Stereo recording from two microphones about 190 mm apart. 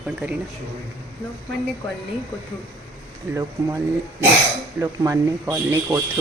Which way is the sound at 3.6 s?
20° right (ahead or behind).